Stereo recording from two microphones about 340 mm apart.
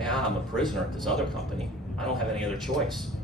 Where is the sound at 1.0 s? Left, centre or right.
Centre.